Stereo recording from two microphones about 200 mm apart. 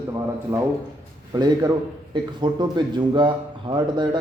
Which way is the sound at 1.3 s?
20° right (ahead or behind).